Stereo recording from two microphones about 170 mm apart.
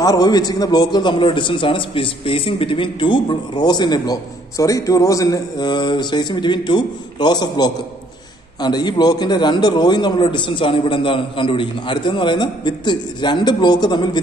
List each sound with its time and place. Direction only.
0.0 s a man's voice: 20° left (ahead or behind)